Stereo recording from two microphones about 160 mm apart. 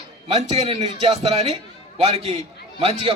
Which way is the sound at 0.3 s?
35° right (ahead or behind).